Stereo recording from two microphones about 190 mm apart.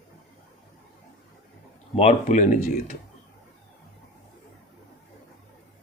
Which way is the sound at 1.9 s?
35° left (ahead or behind).